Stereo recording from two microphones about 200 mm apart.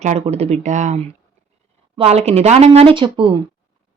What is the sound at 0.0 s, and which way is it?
Speech, 35° right (ahead or behind).